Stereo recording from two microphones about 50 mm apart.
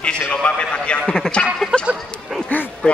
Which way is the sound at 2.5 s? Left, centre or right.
Left.